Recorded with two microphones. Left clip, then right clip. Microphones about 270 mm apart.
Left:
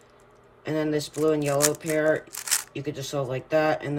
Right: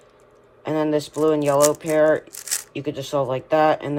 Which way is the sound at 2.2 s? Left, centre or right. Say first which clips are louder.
Left 1 dB; centre.